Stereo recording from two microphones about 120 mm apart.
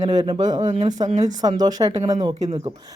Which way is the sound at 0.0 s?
35° right (ahead or behind).